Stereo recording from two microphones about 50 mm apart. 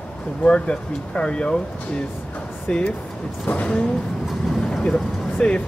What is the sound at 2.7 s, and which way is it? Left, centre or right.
Speech, left.